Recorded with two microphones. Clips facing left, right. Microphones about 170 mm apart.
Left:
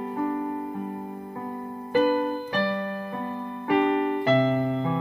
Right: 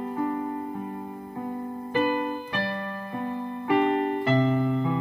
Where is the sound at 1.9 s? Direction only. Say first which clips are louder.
Left 4 dB; 40° left (ahead or behind).